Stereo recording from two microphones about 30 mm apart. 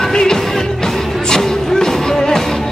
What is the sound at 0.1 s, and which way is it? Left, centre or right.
Music, left.